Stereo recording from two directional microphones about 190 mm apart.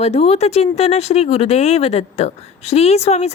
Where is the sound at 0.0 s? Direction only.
35° left (ahead or behind).